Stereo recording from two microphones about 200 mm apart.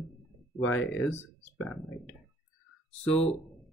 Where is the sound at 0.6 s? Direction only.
10° left (ahead or behind).